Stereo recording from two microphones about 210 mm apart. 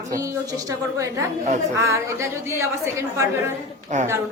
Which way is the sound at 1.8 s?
15° right (ahead or behind).